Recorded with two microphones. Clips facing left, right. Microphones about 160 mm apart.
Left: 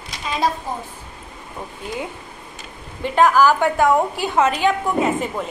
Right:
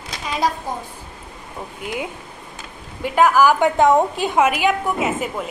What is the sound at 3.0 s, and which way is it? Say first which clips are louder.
A woman's voice: even; 10° right (ahead or behind).